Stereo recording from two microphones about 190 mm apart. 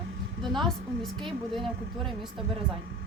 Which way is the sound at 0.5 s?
Centre (ahead or behind).